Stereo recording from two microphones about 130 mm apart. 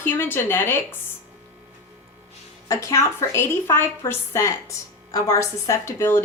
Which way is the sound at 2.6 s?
25° left (ahead or behind).